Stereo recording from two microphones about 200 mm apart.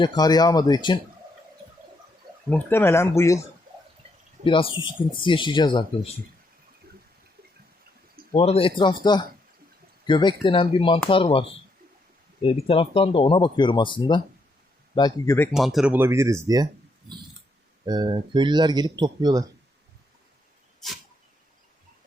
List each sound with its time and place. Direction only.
0.0 s speech: 20° left (ahead or behind)
2.5 s speech: 10° left (ahead or behind)
4.4 s speech: 25° left (ahead or behind)
8.3 s speech: 30° left (ahead or behind)
10.1 s speech: 25° left (ahead or behind)
15.5 s speech: centre (ahead or behind)
17.8 s speech: 20° right (ahead or behind)
20.8 s dog: centre (ahead or behind)